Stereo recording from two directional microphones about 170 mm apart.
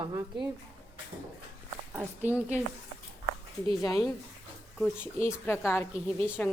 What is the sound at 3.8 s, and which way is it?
Speech, 20° left (ahead or behind).